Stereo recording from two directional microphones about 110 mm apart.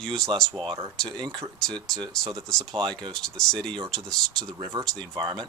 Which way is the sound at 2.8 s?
50° right (ahead or behind).